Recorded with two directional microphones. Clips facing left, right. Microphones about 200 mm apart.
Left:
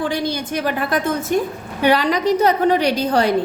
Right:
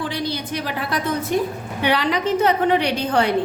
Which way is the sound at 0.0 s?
45° left (ahead or behind).